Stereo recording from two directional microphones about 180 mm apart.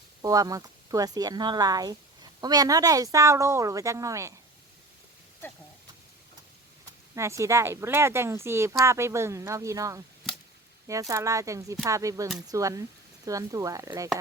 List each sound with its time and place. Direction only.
0.2 s speech: 20° right (ahead or behind)
7.2 s speech: 15° right (ahead or behind)
10.3 s chop: centre (ahead or behind)
10.8 s speech: 15° right (ahead or behind)